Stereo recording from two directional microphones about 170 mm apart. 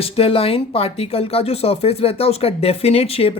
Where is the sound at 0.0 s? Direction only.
35° left (ahead or behind).